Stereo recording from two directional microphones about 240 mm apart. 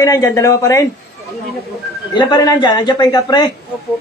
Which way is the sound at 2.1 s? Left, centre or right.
Centre.